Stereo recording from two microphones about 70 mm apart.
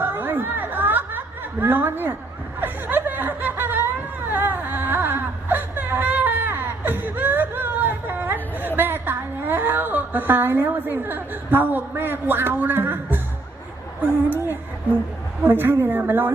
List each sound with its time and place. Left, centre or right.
0.0 s snicker: right
14.0 s a woman's voice: right